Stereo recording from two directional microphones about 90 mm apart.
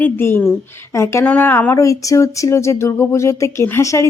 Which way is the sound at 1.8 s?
35° left (ahead or behind).